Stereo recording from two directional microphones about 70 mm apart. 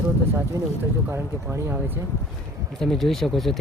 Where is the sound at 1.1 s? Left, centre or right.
Right.